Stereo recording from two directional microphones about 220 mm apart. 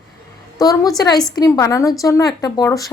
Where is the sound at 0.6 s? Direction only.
15° left (ahead or behind).